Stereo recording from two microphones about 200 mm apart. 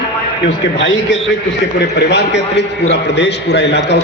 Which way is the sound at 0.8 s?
65° left (ahead or behind).